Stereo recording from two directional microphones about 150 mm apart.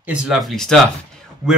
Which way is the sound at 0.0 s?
5° right (ahead or behind).